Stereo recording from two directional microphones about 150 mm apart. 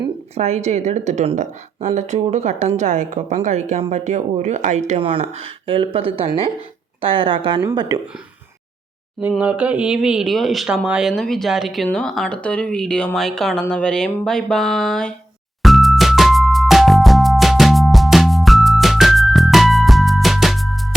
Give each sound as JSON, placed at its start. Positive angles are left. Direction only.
{"t": 0.3, "sound": "a woman's voice", "side_deg": -45}
{"t": 4.9, "sound": "speech", "side_deg": -40}
{"t": 9.4, "sound": "speech", "side_deg": -10}
{"t": 15.6, "sound": "music", "side_deg": 0}